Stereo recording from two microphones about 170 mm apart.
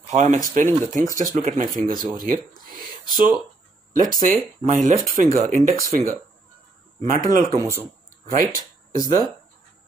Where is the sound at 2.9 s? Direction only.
25° left (ahead or behind).